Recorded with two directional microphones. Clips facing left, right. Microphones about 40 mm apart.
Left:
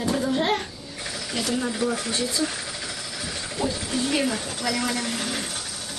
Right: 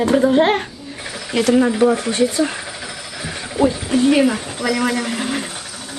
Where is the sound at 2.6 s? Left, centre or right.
Right.